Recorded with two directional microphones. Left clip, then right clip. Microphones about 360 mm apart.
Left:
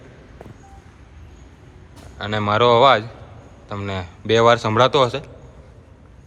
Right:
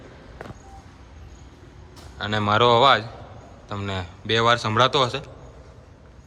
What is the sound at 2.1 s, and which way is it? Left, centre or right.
A man's voice, centre.